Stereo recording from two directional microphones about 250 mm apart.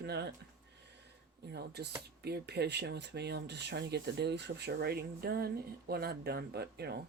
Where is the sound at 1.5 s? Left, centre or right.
Right.